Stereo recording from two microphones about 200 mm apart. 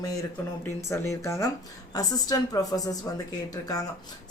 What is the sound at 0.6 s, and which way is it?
Speech, 15° left (ahead or behind).